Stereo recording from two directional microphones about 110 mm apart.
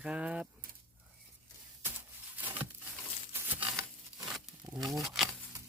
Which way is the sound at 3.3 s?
15° right (ahead or behind).